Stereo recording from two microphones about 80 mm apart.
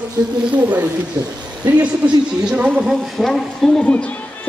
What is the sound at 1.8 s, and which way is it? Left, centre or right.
Speech, centre.